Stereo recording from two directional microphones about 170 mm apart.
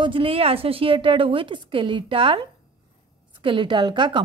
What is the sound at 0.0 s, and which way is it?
A woman's voice, 30° right (ahead or behind).